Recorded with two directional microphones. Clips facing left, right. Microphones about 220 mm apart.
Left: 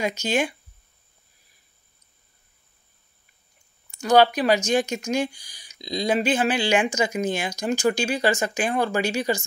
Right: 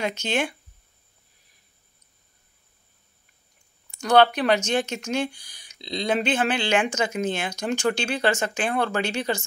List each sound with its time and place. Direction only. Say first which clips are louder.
0.0 s speech: left 2 dB; 10° left (ahead or behind)
4.0 s speech: left 1 dB; 10° left (ahead or behind)
5.3 s speech: even; 55° right (ahead or behind)
5.8 s speech: left 2 dB; 10° left (ahead or behind)